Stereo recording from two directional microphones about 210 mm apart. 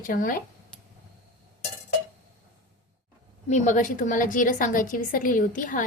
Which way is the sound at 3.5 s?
35° left (ahead or behind).